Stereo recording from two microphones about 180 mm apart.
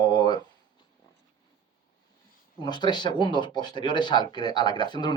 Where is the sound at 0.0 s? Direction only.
25° left (ahead or behind).